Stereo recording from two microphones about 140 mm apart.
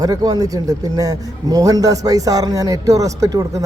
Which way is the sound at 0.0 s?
25° right (ahead or behind).